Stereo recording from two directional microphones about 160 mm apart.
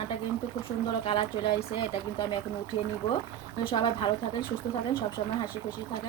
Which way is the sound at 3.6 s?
30° left (ahead or behind).